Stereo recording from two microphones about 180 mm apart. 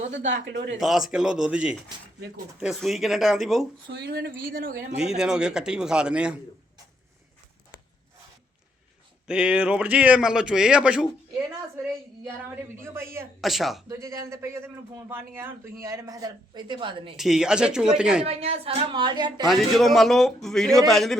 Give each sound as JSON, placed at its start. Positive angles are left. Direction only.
{"t": 0.3, "sound": "a man's voice", "side_deg": -85}
{"t": 0.8, "sound": "speech", "side_deg": 0}
{"t": 3.8, "sound": "speech", "side_deg": -65}
{"t": 4.9, "sound": "speech", "side_deg": -5}
{"t": 9.2, "sound": "speech", "side_deg": -5}
{"t": 12.8, "sound": "a man's voice", "side_deg": -15}
{"t": 13.4, "sound": "speech", "side_deg": 0}
{"t": 13.8, "sound": "a man's voice", "side_deg": -15}
{"t": 17.2, "sound": "speech", "side_deg": 0}
{"t": 18.3, "sound": "speech", "side_deg": -35}
{"t": 19.5, "sound": "speech", "side_deg": 0}